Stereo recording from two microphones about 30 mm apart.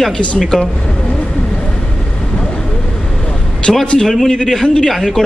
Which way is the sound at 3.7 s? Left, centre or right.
Left.